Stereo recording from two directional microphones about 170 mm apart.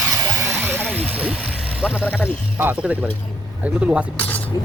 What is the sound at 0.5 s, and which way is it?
Vehicle, 10° right (ahead or behind).